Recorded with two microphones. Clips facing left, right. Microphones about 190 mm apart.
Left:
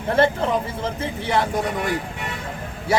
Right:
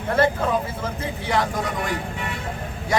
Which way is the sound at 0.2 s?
30° left (ahead or behind).